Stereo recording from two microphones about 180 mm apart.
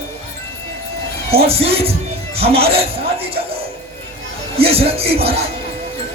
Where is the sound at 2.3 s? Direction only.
35° right (ahead or behind).